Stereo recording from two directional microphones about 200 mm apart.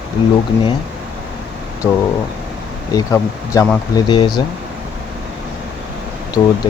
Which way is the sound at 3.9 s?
25° left (ahead or behind).